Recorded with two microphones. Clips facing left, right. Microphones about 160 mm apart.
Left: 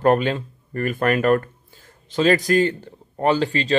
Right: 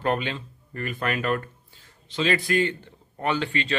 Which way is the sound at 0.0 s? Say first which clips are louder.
Left 8 dB; 45° left (ahead or behind).